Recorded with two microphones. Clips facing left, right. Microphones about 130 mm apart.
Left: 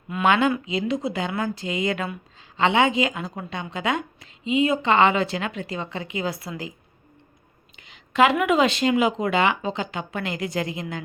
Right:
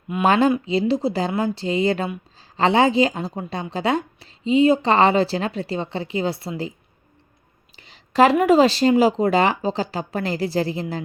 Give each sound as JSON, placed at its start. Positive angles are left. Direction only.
{"t": 0.2, "sound": "a woman's voice", "side_deg": -35}
{"t": 7.8, "sound": "a woman's voice", "side_deg": -35}